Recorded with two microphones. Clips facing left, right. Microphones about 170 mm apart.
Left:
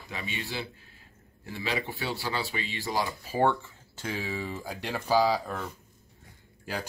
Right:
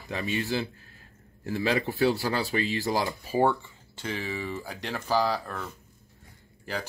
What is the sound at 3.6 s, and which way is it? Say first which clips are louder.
Speech: right 1 dB; 5° left (ahead or behind).